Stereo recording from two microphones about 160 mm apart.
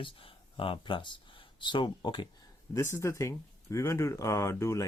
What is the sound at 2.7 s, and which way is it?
Speech, 15° left (ahead or behind).